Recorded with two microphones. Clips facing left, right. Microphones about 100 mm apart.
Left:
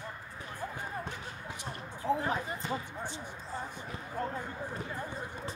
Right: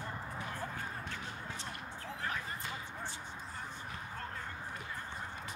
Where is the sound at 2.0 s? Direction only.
20° left (ahead or behind).